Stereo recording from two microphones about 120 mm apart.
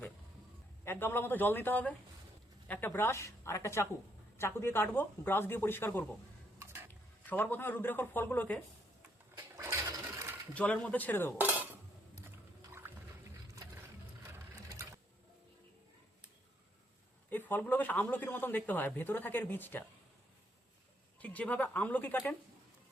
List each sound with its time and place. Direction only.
0.9 s a man's voice: 20° left (ahead or behind)
7.3 s a man's voice: 15° left (ahead or behind)
9.6 s toilet flush: 25° right (ahead or behind)
10.5 s a man's voice: 10° left (ahead or behind)
12.8 s a sound: 15° right (ahead or behind)
14.5 s sewing machine: 30° right (ahead or behind)
17.2 s a man's voice: 15° left (ahead or behind)
21.2 s a man's voice: 10° left (ahead or behind)